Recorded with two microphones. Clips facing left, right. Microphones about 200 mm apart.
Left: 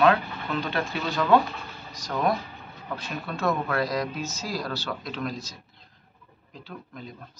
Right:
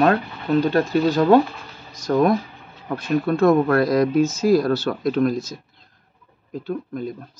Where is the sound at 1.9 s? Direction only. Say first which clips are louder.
Right 9 dB; 50° right (ahead or behind).